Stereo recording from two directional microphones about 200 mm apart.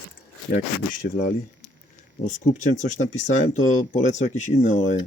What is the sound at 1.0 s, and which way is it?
Speech, 45° left (ahead or behind).